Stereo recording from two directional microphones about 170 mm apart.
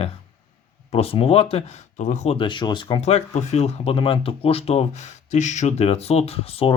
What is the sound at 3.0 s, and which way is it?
Speech, 40° left (ahead or behind).